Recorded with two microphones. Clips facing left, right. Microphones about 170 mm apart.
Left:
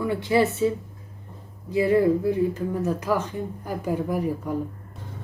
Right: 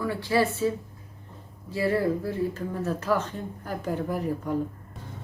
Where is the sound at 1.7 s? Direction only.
15° left (ahead or behind).